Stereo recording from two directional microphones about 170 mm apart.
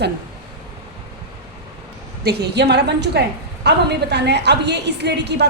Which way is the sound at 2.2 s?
75° right (ahead or behind).